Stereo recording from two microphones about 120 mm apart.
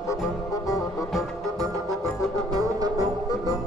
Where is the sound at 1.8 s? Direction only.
30° left (ahead or behind).